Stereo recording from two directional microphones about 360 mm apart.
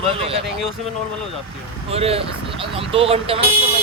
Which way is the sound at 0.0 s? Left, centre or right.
Centre.